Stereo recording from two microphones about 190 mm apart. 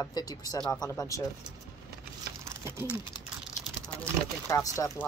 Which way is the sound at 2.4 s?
15° right (ahead or behind).